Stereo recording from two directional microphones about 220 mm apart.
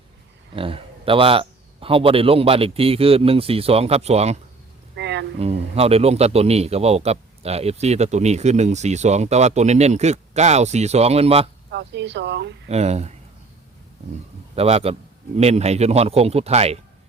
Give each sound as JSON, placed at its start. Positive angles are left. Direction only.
{"t": 0.5, "sound": "a man's voice", "side_deg": -25}
{"t": 4.9, "sound": "a sound", "side_deg": -55}
{"t": 5.4, "sound": "a man's voice", "side_deg": -30}
{"t": 11.7, "sound": "speech", "side_deg": -55}
{"t": 12.6, "sound": "a man's voice", "side_deg": -30}
{"t": 14.5, "sound": "a man's voice", "side_deg": -25}